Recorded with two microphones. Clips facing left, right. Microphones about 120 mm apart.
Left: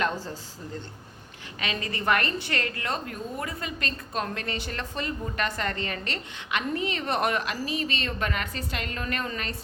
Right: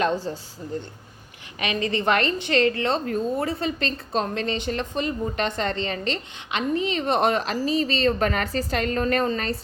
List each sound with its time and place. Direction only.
0.3 s a woman's voice: 25° right (ahead or behind)
1.5 s a woman's voice: 20° right (ahead or behind)